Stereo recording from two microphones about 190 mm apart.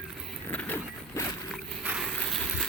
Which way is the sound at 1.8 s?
5° right (ahead or behind).